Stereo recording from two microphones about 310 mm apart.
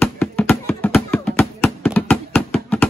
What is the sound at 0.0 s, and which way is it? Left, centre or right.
Music, centre.